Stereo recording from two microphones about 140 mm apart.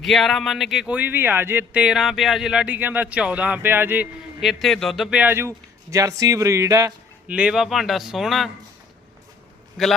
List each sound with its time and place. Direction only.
0.0 s speech: centre (ahead or behind); by 4.1 s 15° right (ahead or behind)
4.4 s speech: centre (ahead or behind)
5.2 s speech: 15° right (ahead or behind)
7.3 s speech: 10° right (ahead or behind)
9.8 s speech: centre (ahead or behind)